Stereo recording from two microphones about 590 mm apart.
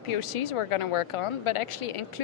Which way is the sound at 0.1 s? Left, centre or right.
Left.